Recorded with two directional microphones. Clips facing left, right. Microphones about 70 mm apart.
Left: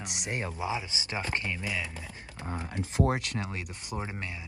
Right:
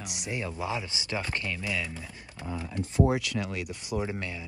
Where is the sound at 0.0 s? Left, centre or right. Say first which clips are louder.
Even; left.